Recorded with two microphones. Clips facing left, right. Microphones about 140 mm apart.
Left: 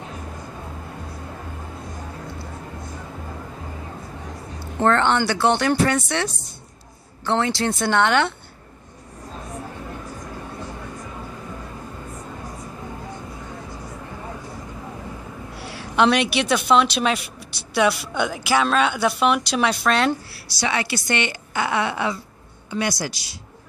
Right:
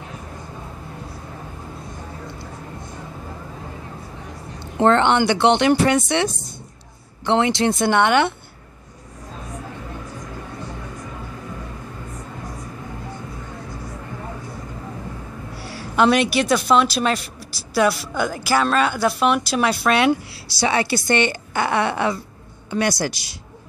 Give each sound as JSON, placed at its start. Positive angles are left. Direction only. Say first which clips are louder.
{"t": 4.6, "sound": "speech", "louder": "right 3 dB", "side_deg": -20}
{"t": 16.0, "sound": "speech", "louder": "right 2 dB", "side_deg": 0}
{"t": 20.2, "sound": "a woman's voice", "louder": "right 4 dB", "side_deg": -30}
{"t": 22.7, "sound": "speech", "louder": "right 4 dB", "side_deg": -65}